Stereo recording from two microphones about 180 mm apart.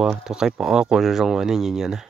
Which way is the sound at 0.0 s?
5° right (ahead or behind).